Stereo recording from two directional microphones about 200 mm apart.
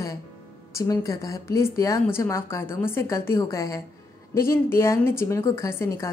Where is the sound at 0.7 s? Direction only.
15° left (ahead or behind).